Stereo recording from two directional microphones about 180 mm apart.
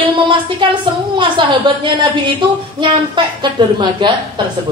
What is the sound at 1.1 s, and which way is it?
Speech, 25° right (ahead or behind).